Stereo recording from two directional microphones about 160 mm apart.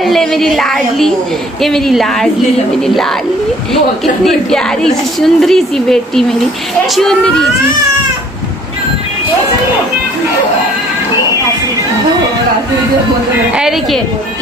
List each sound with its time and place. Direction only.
0.0 s a woman's voice: centre (ahead or behind)
3.7 s a woman's voice: centre (ahead or behind)
13.6 s a woman's voice: centre (ahead or behind)